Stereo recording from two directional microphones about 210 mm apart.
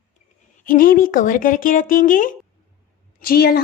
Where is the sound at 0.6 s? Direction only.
40° left (ahead or behind).